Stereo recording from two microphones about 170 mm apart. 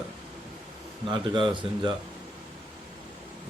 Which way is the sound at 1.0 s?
30° right (ahead or behind).